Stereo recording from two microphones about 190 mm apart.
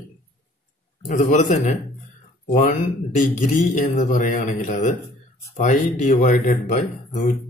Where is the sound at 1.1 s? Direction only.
40° left (ahead or behind).